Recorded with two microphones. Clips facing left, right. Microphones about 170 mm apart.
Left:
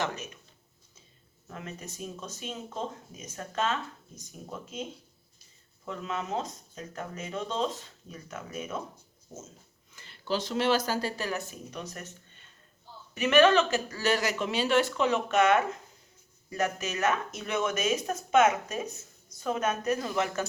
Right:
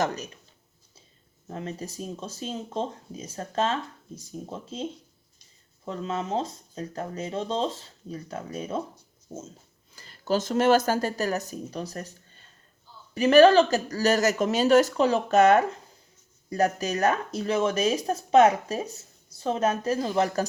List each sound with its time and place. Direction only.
1.5 s speech: 30° right (ahead or behind)
9.9 s speech: 40° right (ahead or behind)